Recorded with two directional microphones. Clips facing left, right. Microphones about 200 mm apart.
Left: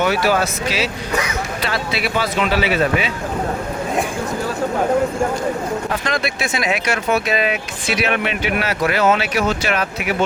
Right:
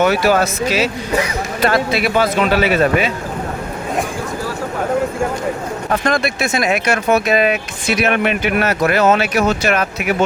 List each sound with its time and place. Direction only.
0.0 s speech: 50° right (ahead or behind)
6.1 s speech: 50° right (ahead or behind)